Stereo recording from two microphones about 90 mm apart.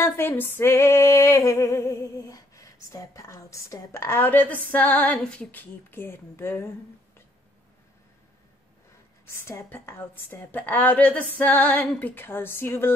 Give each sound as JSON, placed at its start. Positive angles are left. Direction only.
{"t": 0.0, "sound": "female singing", "side_deg": 25}
{"t": 9.5, "sound": "a woman's voice", "side_deg": 30}